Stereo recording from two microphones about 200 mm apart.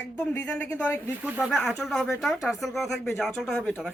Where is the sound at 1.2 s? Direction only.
5° right (ahead or behind).